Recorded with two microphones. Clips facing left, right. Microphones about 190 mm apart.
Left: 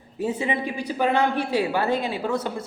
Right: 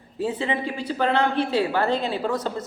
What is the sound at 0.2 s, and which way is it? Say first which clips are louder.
A woman's voice: even; 10° left (ahead or behind).